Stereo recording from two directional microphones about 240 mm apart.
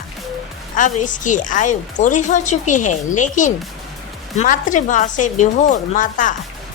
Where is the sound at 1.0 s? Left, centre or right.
Left.